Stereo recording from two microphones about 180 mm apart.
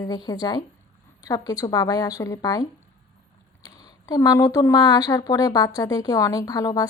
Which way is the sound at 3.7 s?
20° left (ahead or behind).